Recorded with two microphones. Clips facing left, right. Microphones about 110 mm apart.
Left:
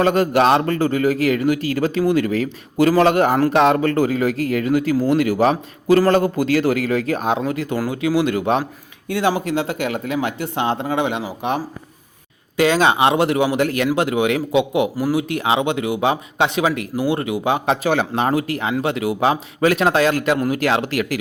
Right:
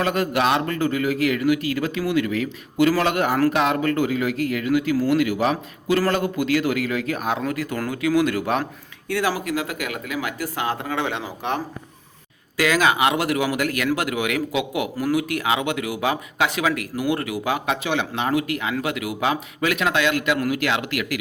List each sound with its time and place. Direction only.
0.0 s a man's voice: 35° left (ahead or behind); by 11.6 s 15° left (ahead or behind)
12.5 s a man's voice: 30° left (ahead or behind)
17.8 s speech: 40° left (ahead or behind)